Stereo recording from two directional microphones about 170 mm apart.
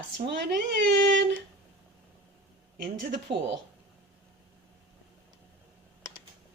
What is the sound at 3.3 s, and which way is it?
Speech, 30° right (ahead or behind).